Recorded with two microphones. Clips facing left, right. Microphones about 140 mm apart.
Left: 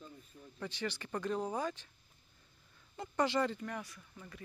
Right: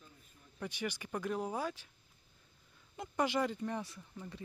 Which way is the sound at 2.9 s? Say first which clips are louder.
Left 1 dB; 10° right (ahead or behind).